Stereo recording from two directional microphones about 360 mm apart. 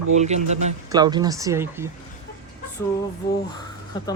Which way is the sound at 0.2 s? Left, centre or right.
Centre.